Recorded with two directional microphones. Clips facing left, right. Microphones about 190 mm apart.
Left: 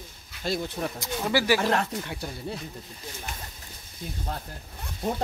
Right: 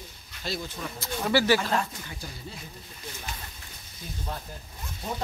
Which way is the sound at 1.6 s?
70° left (ahead or behind).